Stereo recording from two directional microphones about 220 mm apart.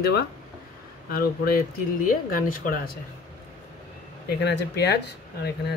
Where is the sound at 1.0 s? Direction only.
40° left (ahead or behind).